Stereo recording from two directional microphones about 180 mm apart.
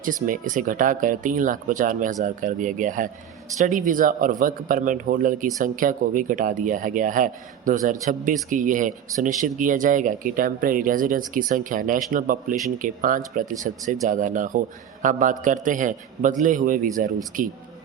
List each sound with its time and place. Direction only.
0.0 s speech: 50° right (ahead or behind)